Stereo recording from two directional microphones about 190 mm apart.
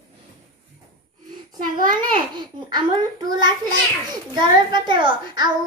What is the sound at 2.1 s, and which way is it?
A child's voice, 25° right (ahead or behind).